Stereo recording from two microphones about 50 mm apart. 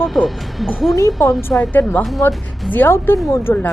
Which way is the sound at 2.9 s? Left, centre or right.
Left.